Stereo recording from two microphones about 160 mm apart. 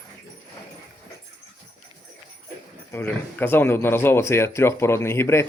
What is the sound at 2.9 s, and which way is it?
Speech, 10° left (ahead or behind).